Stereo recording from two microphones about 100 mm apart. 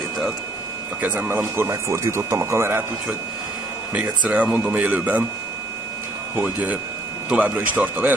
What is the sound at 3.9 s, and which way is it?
Speech, 10° right (ahead or behind).